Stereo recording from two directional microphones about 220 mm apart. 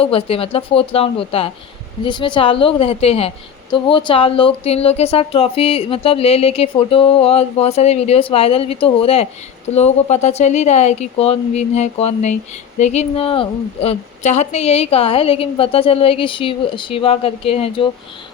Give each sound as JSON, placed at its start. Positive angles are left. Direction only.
{"t": 0.0, "sound": "a woman's voice", "side_deg": 25}